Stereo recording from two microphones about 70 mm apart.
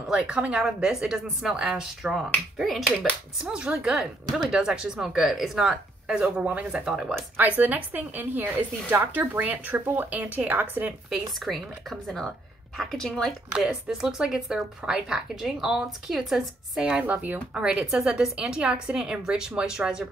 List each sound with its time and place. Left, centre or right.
0.1 s speech: centre
3.4 s speech: centre
5.7 s speech: centre
7.4 s a woman's voice: right
11.3 s speech: centre
13.5 s speech: centre
17.0 s speech: right